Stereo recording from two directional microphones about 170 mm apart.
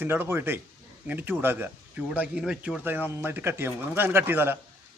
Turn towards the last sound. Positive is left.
turn(degrees=-10)  # may be behind; listen again after turning